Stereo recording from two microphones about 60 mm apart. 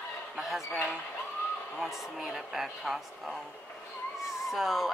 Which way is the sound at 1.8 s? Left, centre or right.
Centre.